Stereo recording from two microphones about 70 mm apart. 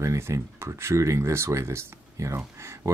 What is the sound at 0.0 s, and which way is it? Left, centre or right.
Speech, right.